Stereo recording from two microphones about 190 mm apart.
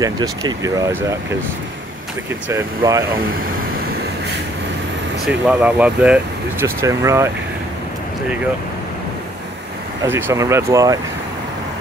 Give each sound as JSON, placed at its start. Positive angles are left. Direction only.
{"t": 0.0, "sound": "speech", "side_deg": -20}
{"t": 2.5, "sound": "speech", "side_deg": -15}
{"t": 5.2, "sound": "speech", "side_deg": -5}
{"t": 10.0, "sound": "speech", "side_deg": -15}